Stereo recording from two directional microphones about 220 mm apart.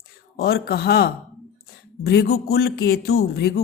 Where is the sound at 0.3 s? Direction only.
45° left (ahead or behind).